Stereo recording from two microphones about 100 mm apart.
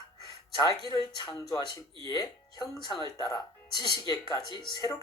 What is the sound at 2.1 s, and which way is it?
Speech, 45° left (ahead or behind).